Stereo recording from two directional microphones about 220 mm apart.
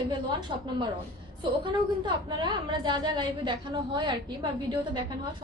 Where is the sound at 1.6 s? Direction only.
20° right (ahead or behind).